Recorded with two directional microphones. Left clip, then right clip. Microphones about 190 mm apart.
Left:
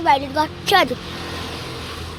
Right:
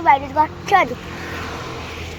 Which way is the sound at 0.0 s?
25° left (ahead or behind).